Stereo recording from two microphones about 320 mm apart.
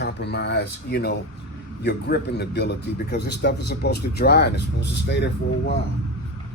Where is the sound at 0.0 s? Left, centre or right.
Left.